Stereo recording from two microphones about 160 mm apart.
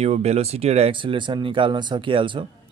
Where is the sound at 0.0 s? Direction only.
40° right (ahead or behind).